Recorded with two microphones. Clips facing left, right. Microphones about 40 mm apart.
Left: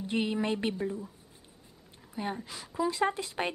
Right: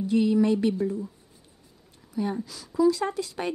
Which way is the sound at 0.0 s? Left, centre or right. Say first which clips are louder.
Right 8 dB; left.